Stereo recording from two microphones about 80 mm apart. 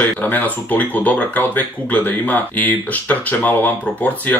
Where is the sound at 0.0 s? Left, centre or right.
Left.